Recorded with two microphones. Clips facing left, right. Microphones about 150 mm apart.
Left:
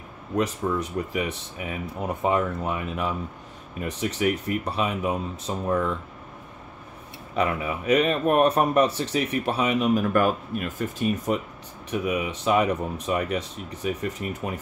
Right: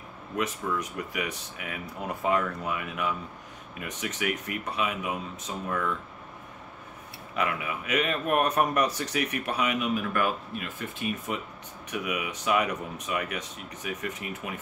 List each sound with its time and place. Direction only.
0.4 s speech: 30° left (ahead or behind)
7.3 s speech: 35° left (ahead or behind)